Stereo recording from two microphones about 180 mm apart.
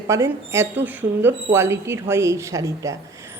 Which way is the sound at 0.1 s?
15° right (ahead or behind).